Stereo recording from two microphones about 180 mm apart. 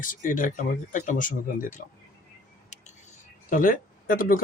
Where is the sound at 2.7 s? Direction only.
40° left (ahead or behind).